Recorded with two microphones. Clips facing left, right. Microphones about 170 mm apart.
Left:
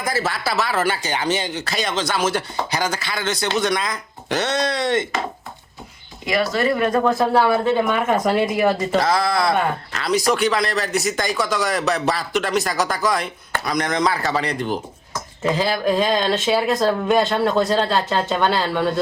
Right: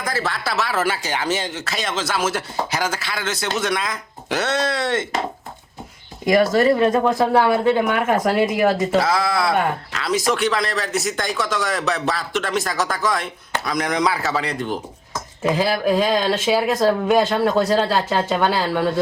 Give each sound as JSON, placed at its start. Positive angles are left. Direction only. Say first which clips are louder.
{"t": 0.0, "sound": "speech", "louder": "left 1 dB", "side_deg": 5}
{"t": 6.2, "sound": "speech", "louder": "right 5 dB", "side_deg": -45}
{"t": 6.7, "sound": "speech", "louder": "right 2 dB", "side_deg": -25}
{"t": 7.0, "sound": "speech", "louder": "even", "side_deg": -15}